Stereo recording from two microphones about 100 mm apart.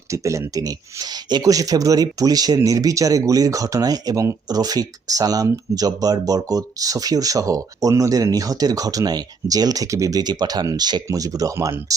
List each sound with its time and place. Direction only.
0.1 s speech: 30° right (ahead or behind)